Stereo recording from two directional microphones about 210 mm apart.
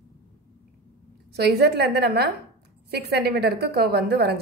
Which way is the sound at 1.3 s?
50° right (ahead or behind).